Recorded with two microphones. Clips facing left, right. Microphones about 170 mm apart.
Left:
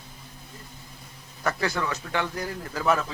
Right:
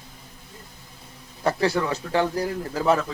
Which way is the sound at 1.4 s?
30° right (ahead or behind).